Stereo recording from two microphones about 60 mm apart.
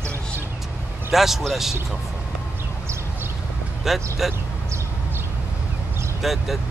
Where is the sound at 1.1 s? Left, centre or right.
Centre.